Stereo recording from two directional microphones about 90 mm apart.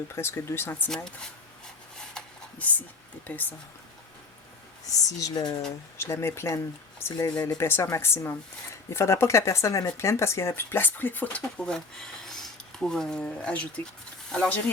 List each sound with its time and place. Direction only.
0.2 s speech: 30° left (ahead or behind)
0.9 s speech: 10° left (ahead or behind)
2.1 s a sound: 15° left (ahead or behind)
3.3 s speech: 20° left (ahead or behind)
5.0 s speech: 45° left (ahead or behind)
6.0 s speech: 30° left (ahead or behind); by 14.7 s 10° left (ahead or behind)